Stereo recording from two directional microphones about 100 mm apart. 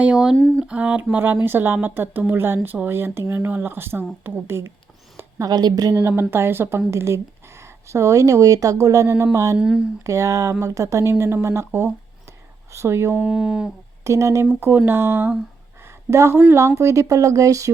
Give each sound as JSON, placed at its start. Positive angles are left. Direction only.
{"t": 0.0, "sound": "speech", "side_deg": -10}
{"t": 0.3, "sound": "speech", "side_deg": 10}
{"t": 0.6, "sound": "speech", "side_deg": -15}
{"t": 5.4, "sound": "speech", "side_deg": -40}
{"t": 6.0, "sound": "speech", "side_deg": -25}
{"t": 9.6, "sound": "speech", "side_deg": -10}
{"t": 10.0, "sound": "speech", "side_deg": -30}
{"t": 13.2, "sound": "speech", "side_deg": -5}
{"t": 14.0, "sound": "speech", "side_deg": -30}